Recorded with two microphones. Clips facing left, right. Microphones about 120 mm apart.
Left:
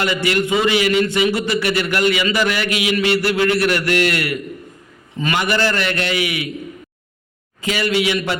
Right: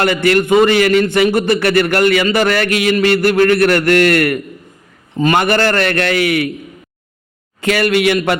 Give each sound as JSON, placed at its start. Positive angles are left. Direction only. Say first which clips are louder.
{"t": 0.0, "sound": "a man's voice", "louder": "right 6 dB", "side_deg": -55}
{"t": 5.1, "sound": "a man's voice", "louder": "right 6 dB", "side_deg": -45}
{"t": 7.6, "sound": "a man's voice", "louder": "right 6 dB", "side_deg": -60}